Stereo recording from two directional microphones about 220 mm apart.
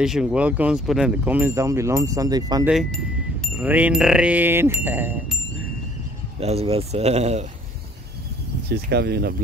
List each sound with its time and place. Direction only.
0.0 s speech: centre (ahead or behind)
2.7 s speech: centre (ahead or behind)
6.4 s speech: 25° right (ahead or behind)
8.6 s speech: 45° right (ahead or behind)